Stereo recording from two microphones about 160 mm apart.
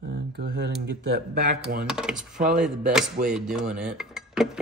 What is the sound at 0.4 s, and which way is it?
Speech, 90° right.